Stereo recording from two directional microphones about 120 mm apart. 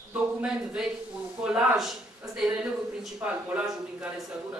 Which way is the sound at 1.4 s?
5° right (ahead or behind).